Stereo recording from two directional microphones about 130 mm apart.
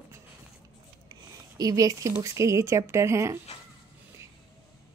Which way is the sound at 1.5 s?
30° right (ahead or behind).